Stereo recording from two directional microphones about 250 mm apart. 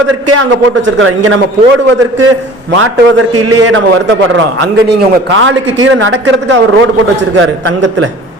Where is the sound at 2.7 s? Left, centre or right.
Right.